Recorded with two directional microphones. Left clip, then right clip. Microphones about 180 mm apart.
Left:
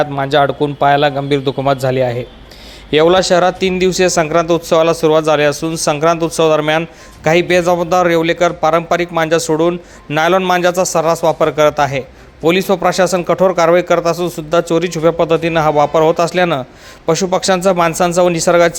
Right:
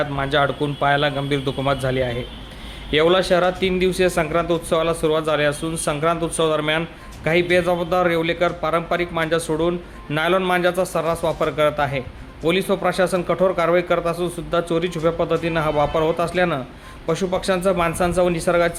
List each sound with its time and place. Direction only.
0.0 s a man's voice: 40° left (ahead or behind)